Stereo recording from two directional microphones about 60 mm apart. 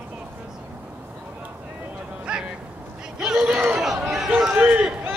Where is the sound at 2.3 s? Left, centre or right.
Centre.